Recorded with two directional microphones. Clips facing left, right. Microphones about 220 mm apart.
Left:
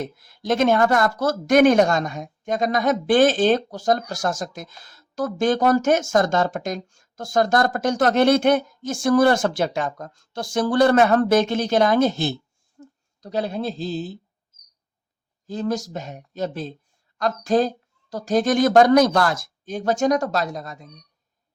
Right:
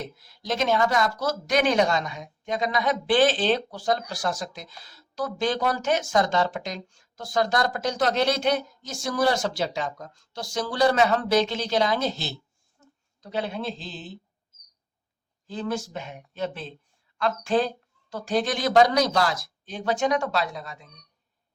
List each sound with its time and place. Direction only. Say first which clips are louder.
0.0 s speech: left 6 dB; 50° left (ahead or behind)
12.8 s a sound: left 13 dB; 45° left (ahead or behind)
13.2 s speech: left 4 dB; 40° left (ahead or behind)
15.4 s speech: left 4 dB; 40° left (ahead or behind)